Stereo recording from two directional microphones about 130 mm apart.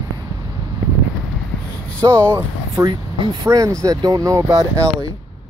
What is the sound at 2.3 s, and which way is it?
Speech, 30° right (ahead or behind).